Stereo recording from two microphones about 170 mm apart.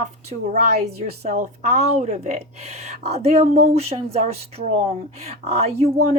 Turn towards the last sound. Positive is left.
turn(degrees=-40)  # may be behind; listen again after turning